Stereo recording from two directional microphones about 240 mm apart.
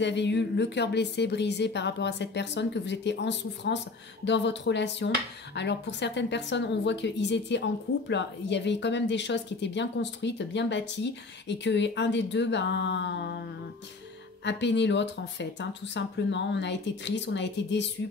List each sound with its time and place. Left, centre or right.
0.0 s a woman's voice: left
14.4 s a woman's voice: left